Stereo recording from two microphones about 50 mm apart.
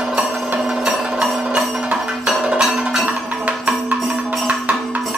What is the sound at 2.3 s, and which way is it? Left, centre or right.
Music, centre.